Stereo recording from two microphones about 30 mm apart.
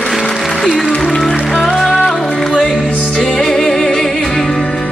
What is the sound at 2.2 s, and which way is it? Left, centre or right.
Music, left.